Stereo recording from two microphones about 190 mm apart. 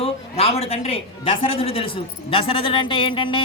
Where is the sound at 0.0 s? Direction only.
30° left (ahead or behind).